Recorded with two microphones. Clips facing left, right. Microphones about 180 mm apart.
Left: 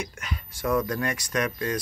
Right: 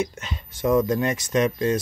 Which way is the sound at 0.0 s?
25° right (ahead or behind).